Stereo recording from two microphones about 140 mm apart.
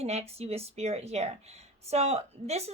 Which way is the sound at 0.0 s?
50° right (ahead or behind).